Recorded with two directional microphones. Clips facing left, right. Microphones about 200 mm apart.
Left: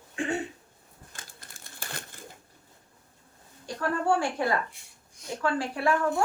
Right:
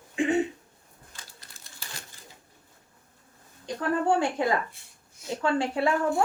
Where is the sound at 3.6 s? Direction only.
20° right (ahead or behind).